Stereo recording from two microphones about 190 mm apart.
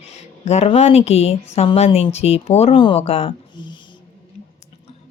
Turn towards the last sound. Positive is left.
turn(degrees=30)  # may be behind; listen again after turning